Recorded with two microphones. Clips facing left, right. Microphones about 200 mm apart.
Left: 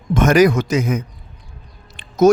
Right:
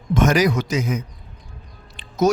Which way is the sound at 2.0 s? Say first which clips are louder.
Left 6 dB; 50° left (ahead or behind).